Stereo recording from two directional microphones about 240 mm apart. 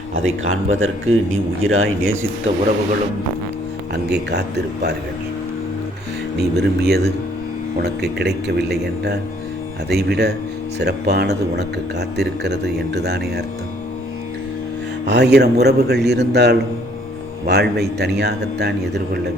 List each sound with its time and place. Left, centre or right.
0.3 s speech: right
4.1 s speech: right
6.3 s speech: right
15.0 s speech: right